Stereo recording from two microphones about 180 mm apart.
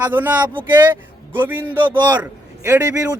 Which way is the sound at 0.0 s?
10° right (ahead or behind).